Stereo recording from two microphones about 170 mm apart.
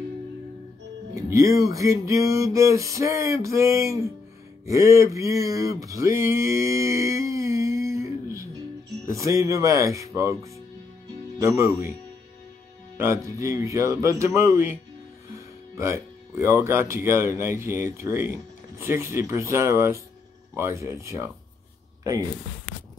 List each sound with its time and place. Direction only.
1.1 s music: 20° right (ahead or behind)
4.6 s a sound: 15° right (ahead or behind)
9.0 s speech: 20° right (ahead or behind)
11.3 s music: 20° right (ahead or behind)
12.9 s music: 15° right (ahead or behind)
15.3 s speech: 15° right (ahead or behind)
18.0 s music: 15° right (ahead or behind)